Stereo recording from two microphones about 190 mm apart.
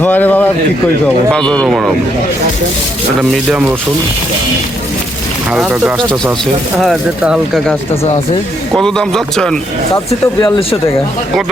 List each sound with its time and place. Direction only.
0.0 s a man's voice: 10° left (ahead or behind)
3.2 s speech: 5° right (ahead or behind)
5.5 s speech: 5° right (ahead or behind)
10.1 s speech: 30° left (ahead or behind)